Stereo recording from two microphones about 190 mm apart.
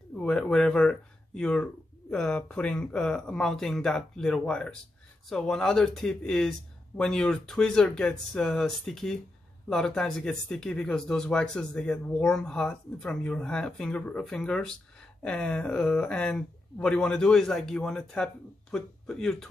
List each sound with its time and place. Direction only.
0.1 s speech: 5° left (ahead or behind)